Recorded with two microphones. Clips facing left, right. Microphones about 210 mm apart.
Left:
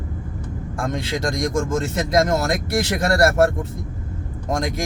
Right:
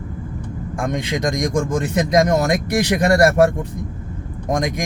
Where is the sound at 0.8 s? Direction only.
20° right (ahead or behind).